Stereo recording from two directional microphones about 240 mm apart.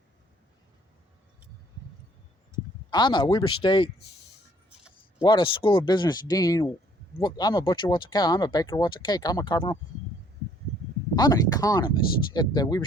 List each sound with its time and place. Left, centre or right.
2.9 s speech: centre
5.2 s speech: centre
11.1 s speech: centre